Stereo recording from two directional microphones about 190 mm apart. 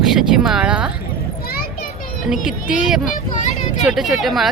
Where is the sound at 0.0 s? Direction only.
Centre (ahead or behind).